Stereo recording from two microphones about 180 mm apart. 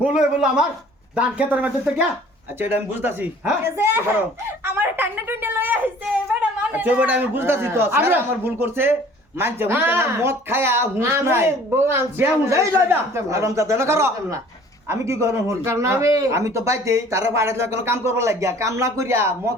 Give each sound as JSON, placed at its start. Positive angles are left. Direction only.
{"t": 0.1, "sound": "speech", "side_deg": -5}